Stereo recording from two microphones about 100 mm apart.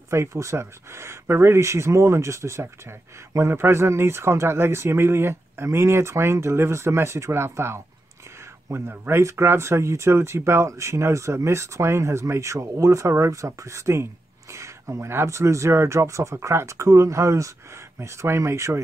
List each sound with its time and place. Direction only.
0.1 s speech: 30° right (ahead or behind)